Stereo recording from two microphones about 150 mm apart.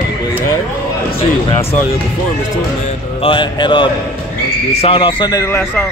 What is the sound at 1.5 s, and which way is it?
Speech, 40° left (ahead or behind).